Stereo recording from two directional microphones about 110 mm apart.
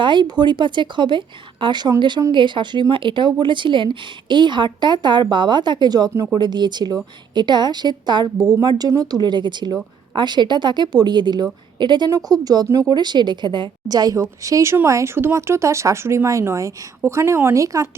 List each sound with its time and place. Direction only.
0.0 s a woman's voice: 45° right (ahead or behind); by 17.8 s 30° right (ahead or behind)